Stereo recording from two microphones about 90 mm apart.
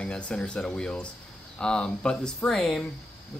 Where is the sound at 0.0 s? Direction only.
10° left (ahead or behind).